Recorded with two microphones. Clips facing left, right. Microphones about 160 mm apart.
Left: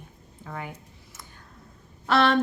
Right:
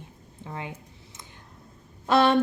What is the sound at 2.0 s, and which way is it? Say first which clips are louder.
Speech: right 1 dB; 20° right (ahead or behind).